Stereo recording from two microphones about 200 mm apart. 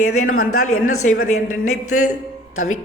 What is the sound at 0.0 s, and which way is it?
A man's voice, 90° left.